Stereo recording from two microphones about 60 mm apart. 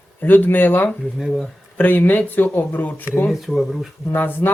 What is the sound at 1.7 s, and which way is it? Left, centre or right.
Speech, left.